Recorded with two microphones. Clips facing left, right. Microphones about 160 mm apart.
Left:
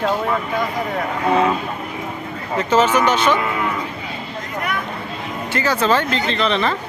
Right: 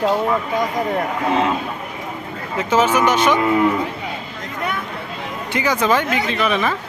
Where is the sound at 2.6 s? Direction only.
10° right (ahead or behind).